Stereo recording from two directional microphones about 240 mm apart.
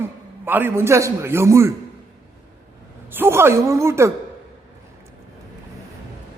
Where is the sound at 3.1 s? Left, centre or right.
Centre.